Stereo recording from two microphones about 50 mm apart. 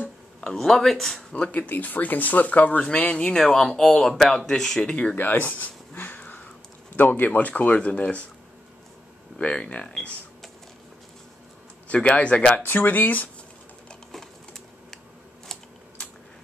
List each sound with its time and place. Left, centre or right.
0.4 s speech: centre
1.3 s speech: left
5.1 s a sound: left
7.8 s speech: left
9.4 s speech: left
11.9 s speech: left
12.6 s speech: left
14.1 s typing: centre